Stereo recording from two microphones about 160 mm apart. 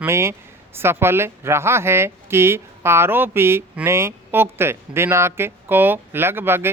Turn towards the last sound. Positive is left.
turn(degrees=-15)  # may be behind; listen again after turning